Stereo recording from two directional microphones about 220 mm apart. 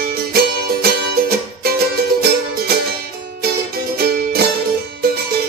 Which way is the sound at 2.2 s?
45° right (ahead or behind).